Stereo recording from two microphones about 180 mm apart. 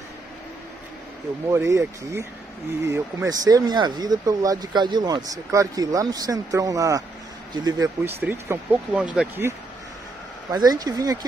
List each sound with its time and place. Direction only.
1.5 s speech: 15° right (ahead or behind)
10.5 s speech: 20° right (ahead or behind)